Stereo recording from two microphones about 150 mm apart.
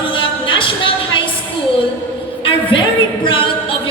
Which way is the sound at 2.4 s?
35° left (ahead or behind).